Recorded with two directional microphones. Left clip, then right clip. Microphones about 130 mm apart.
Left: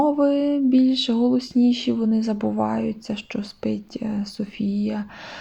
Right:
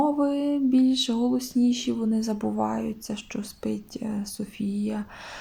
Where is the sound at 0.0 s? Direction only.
35° left (ahead or behind).